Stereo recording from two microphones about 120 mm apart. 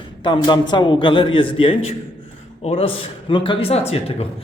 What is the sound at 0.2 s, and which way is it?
A man's voice, 40° left (ahead or behind).